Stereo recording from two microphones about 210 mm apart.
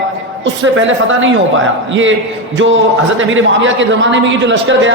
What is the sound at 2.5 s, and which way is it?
A man's voice, 65° right (ahead or behind).